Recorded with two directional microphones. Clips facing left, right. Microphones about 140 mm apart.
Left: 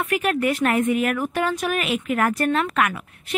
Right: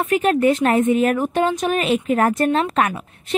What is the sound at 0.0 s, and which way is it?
Speech, 25° right (ahead or behind).